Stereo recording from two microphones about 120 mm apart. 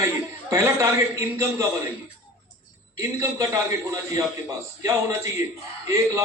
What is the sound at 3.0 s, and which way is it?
A man's voice, 25° right (ahead or behind).